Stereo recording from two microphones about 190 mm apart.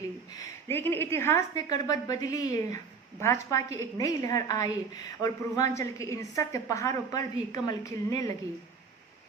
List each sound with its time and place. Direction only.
0.3 s a woman's voice: 15° left (ahead or behind)